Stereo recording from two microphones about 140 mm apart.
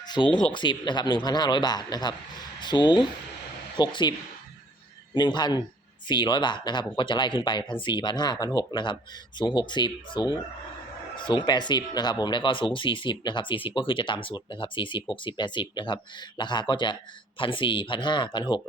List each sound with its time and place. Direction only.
0.2 s speech: 30° left (ahead or behind)
5.1 s speech: 30° left (ahead or behind)